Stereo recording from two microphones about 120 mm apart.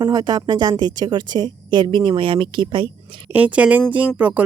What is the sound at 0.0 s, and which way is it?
A woman's voice, 35° right (ahead or behind).